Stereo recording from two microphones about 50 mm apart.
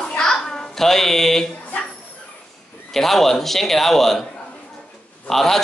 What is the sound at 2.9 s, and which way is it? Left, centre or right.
Speech, centre.